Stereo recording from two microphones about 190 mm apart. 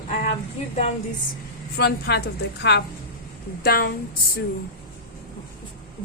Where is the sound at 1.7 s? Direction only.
55° left (ahead or behind).